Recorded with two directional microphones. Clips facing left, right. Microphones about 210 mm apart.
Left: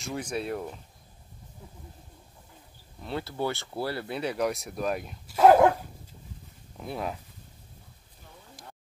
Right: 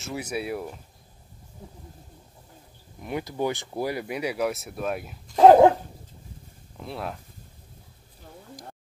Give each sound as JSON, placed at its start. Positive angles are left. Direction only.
{"t": 0.0, "sound": "speech", "side_deg": -5}
{"t": 3.0, "sound": "speech", "side_deg": -15}
{"t": 5.4, "sound": "dog", "side_deg": -25}
{"t": 6.8, "sound": "speech", "side_deg": 5}